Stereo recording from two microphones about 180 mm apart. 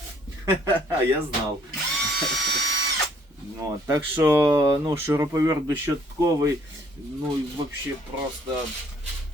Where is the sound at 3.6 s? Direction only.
15° right (ahead or behind).